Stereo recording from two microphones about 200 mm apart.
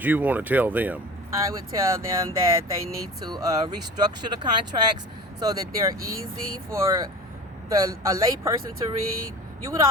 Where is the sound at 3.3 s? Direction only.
20° right (ahead or behind).